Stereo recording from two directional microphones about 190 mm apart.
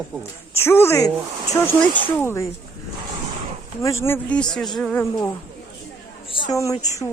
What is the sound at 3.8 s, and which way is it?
Speech, 15° left (ahead or behind).